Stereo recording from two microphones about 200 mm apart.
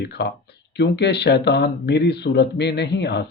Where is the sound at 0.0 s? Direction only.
55° left (ahead or behind).